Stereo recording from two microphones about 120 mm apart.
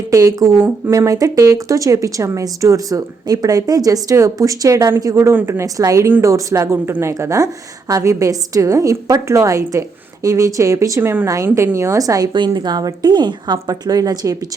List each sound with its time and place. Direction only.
0.1 s a woman's voice: 30° right (ahead or behind)